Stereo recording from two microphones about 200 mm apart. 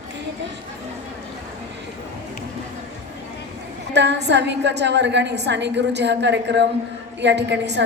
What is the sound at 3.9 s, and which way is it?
A woman's voice, 60° right (ahead or behind).